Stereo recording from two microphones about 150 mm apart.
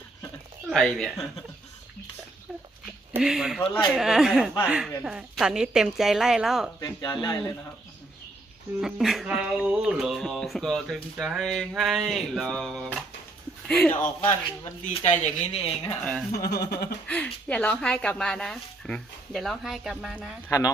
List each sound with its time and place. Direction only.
0.7 s speech: 5° left (ahead or behind)
3.2 s speech: 5° right (ahead or behind)
6.7 s speech: 30° left (ahead or behind)
8.8 s speech: centre (ahead or behind)
14.9 s speech: 50° left (ahead or behind)
15.8 s speech: 15° left (ahead or behind)
16.6 s speech: 90° left
17.1 s speech: 10° left (ahead or behind); by 20.3 s 5° right (ahead or behind)
20.5 s speech: 25° left (ahead or behind)